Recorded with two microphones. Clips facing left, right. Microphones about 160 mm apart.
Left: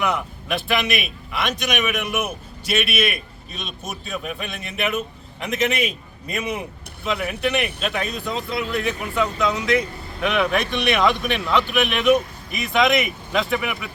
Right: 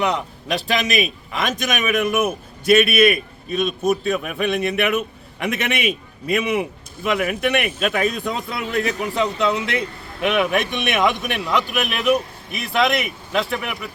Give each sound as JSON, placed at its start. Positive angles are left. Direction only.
{"t": 0.0, "sound": "a man's voice", "side_deg": -35}
{"t": 11.3, "sound": "speech", "side_deg": 0}